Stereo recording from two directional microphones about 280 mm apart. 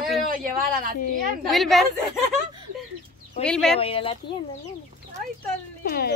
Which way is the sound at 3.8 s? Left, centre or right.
Centre.